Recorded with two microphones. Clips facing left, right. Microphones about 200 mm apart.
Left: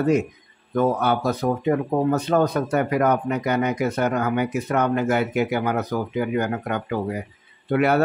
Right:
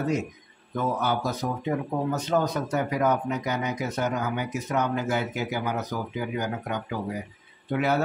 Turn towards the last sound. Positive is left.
turn(degrees=65)  # may be behind; listen again after turning